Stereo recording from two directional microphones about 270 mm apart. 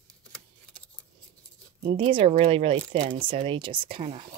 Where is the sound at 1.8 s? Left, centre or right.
Centre.